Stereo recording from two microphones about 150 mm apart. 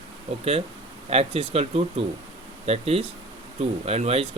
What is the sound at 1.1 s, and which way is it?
Speech, 40° right (ahead or behind).